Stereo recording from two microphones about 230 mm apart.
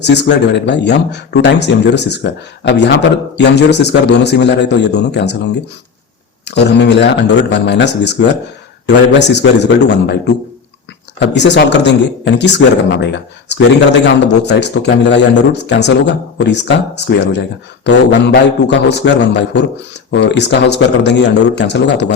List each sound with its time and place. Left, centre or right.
0.0 s speech: left